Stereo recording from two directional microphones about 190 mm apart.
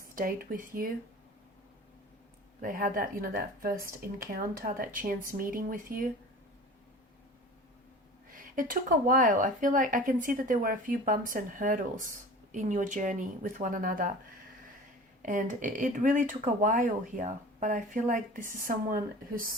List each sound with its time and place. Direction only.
0.2 s speech: 45° right (ahead or behind)
2.6 s speech: 45° right (ahead or behind)
8.5 s speech: 45° right (ahead or behind)
15.2 s speech: 45° right (ahead or behind)